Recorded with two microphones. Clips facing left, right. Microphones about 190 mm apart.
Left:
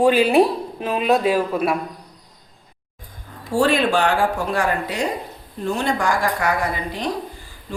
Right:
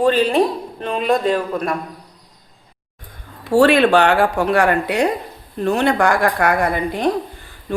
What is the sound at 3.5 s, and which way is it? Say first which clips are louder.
Speech: right 6 dB; 70° right (ahead or behind).